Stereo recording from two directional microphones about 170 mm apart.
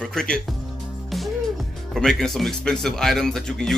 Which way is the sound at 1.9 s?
Centre (ahead or behind).